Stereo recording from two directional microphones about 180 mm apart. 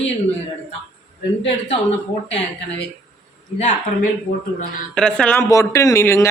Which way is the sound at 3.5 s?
40° left (ahead or behind).